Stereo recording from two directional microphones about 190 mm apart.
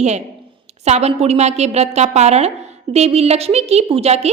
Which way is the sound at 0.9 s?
35° right (ahead or behind).